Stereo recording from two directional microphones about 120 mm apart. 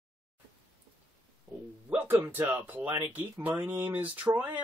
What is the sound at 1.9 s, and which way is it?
Speech, 15° right (ahead or behind).